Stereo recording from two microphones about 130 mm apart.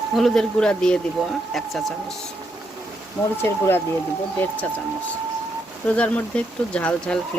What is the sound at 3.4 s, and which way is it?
Speech, 15° left (ahead or behind).